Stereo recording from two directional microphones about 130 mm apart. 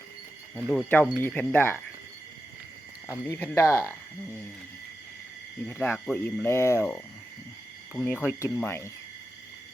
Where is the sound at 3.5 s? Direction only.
20° left (ahead or behind).